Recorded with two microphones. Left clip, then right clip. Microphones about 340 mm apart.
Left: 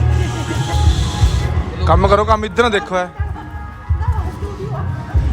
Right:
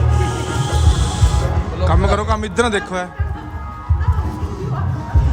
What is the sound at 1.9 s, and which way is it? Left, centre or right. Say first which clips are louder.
A man's voice: left 7 dB; centre.